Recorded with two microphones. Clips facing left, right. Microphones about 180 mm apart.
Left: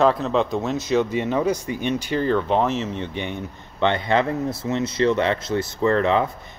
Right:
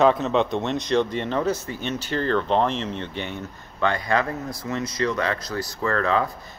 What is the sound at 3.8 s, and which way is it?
Speech, 25° left (ahead or behind).